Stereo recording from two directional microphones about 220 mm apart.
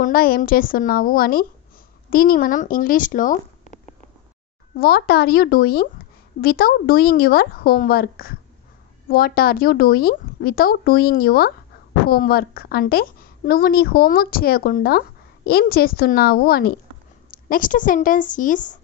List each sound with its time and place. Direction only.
0.0 s a woman's voice: 40° left (ahead or behind)